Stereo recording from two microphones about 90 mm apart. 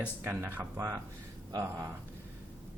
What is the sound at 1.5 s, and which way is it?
Speech, 40° right (ahead or behind).